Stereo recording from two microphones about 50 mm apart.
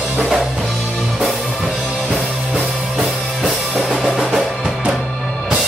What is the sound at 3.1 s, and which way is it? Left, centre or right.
Music, centre.